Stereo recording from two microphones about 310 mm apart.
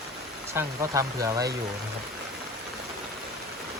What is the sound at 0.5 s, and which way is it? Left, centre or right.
Speech, centre.